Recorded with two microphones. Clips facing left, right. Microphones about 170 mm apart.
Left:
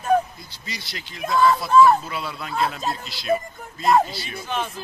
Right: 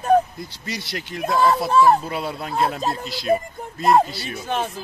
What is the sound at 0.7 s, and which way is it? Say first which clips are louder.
Speech: right 6 dB; 65° right (ahead or behind).